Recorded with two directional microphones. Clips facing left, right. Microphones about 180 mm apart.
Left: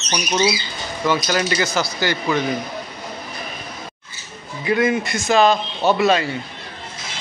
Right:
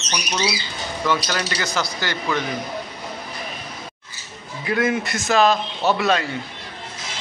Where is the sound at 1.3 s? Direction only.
10° left (ahead or behind).